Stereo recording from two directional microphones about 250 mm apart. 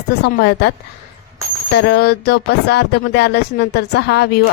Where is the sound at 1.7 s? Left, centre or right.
Left.